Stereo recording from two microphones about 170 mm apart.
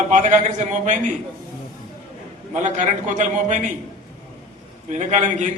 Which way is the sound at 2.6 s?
45° right (ahead or behind).